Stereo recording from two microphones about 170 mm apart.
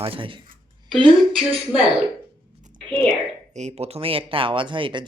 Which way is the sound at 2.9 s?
5° left (ahead or behind).